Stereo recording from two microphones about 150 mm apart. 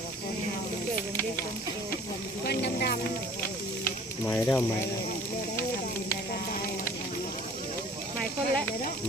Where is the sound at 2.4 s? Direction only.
90° left.